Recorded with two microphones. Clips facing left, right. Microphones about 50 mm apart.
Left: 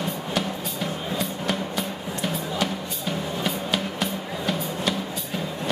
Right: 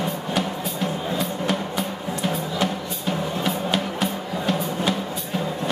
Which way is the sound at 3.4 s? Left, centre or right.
Centre.